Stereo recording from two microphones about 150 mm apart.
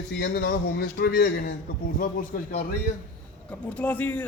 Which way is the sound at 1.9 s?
70° left (ahead or behind).